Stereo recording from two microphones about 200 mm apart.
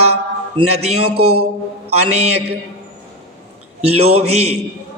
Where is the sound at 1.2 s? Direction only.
90° right.